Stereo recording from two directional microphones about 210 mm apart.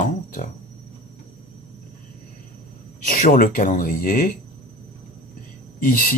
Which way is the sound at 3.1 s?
40° left (ahead or behind).